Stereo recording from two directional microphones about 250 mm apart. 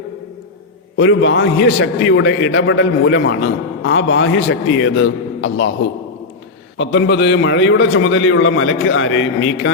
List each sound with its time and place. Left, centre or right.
0.9 s a man's voice: left
6.7 s a man's voice: left